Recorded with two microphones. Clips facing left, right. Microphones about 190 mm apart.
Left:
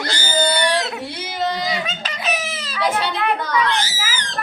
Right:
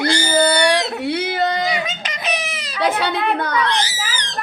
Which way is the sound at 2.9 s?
60° right (ahead or behind).